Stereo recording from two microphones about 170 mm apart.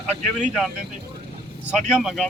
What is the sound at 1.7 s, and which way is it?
Speech, centre (ahead or behind).